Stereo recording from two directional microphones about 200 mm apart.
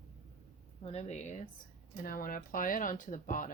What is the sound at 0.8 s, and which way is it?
Speech, 30° left (ahead or behind).